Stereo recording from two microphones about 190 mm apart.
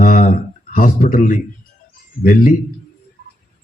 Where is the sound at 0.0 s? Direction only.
45° left (ahead or behind).